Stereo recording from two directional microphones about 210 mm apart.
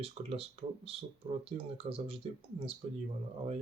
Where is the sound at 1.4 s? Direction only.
25° right (ahead or behind).